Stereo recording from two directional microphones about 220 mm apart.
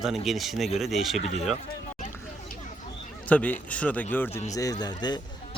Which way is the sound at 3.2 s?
5° left (ahead or behind).